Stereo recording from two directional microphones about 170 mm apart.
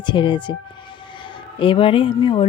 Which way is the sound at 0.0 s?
25° left (ahead or behind).